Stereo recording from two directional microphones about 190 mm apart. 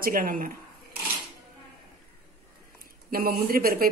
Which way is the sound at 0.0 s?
50° right (ahead or behind).